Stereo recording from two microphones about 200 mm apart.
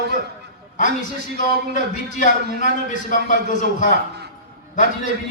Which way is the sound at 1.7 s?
40° left (ahead or behind).